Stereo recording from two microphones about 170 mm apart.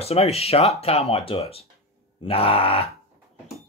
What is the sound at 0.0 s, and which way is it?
Speech, 35° left (ahead or behind).